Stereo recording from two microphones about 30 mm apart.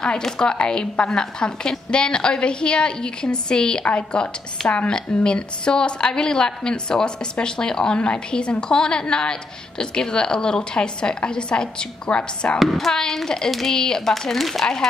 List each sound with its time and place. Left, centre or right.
0.4 s a woman's voice: left
4.8 s a woman's voice: left
12.6 s speech: centre